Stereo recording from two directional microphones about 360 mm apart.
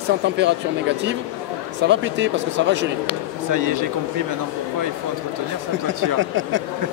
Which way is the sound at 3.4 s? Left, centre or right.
Right.